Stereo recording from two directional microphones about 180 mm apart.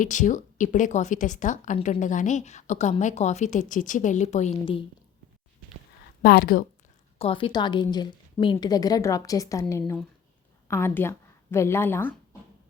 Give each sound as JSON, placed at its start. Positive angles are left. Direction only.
{"t": 0.0, "sound": "a woman's voice", "side_deg": 45}
{"t": 6.2, "sound": "speech", "side_deg": 55}
{"t": 7.2, "sound": "a woman's voice", "side_deg": 30}